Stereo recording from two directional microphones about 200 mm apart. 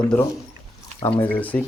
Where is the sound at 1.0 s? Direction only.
10° left (ahead or behind).